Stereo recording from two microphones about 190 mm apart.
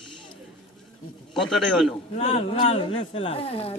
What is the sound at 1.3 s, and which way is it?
Speech, centre (ahead or behind).